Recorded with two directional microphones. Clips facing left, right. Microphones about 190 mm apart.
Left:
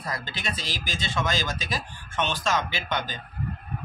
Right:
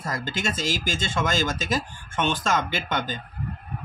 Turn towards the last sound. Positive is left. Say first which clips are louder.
# right 3 dB
turn(degrees=-50)  # may be behind; listen again after turning